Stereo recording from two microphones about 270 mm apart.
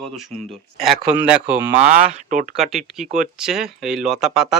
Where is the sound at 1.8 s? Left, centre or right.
Right.